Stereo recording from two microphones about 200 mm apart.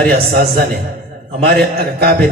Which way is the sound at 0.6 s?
50° right (ahead or behind).